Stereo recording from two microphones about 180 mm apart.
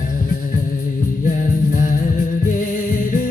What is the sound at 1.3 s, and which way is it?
Music, 50° left (ahead or behind).